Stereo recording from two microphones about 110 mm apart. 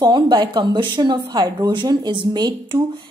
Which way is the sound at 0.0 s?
45° right (ahead or behind).